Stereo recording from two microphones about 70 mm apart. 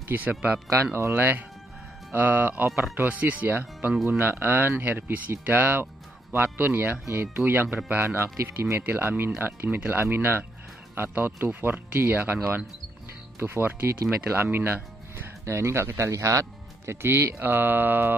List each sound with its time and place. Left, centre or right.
0.1 s speech: right